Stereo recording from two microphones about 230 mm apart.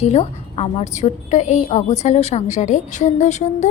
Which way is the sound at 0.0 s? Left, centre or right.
Left.